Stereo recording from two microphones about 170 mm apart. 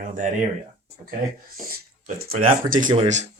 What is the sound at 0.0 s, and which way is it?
Speech, 50° right (ahead or behind).